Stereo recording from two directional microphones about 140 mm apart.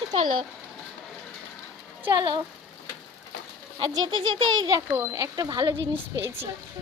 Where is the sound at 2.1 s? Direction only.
35° right (ahead or behind).